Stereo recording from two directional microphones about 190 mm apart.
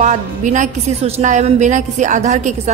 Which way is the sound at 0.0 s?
40° right (ahead or behind).